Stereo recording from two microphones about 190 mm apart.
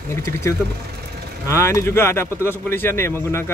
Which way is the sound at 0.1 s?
15° left (ahead or behind).